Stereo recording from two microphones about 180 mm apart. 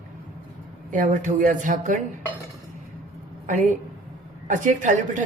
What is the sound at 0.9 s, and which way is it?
A woman's voice, 45° right (ahead or behind).